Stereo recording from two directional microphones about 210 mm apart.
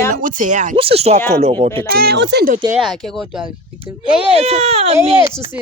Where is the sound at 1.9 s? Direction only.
45° right (ahead or behind).